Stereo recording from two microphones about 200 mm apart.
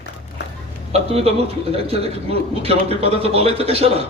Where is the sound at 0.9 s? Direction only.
30° right (ahead or behind).